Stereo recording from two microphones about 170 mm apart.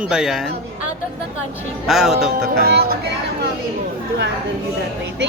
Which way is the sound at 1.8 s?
Centre (ahead or behind).